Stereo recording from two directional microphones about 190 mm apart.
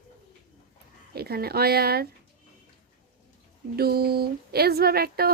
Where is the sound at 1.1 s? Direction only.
55° right (ahead or behind).